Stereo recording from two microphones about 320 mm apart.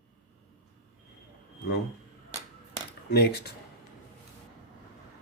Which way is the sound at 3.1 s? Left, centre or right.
Left.